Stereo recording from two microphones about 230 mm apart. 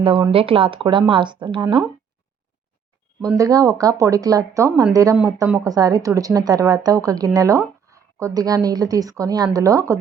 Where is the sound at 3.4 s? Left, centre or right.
Centre.